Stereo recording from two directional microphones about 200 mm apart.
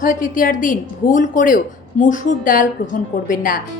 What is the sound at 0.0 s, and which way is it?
A woman's voice, 40° left (ahead or behind).